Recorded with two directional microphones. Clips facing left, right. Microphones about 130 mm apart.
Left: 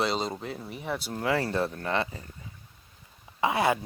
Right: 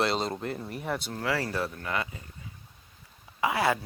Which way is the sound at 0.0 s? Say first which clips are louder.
Right 1 dB; centre (ahead or behind).